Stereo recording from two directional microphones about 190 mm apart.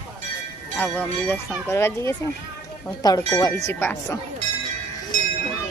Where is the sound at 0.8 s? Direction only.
10° left (ahead or behind).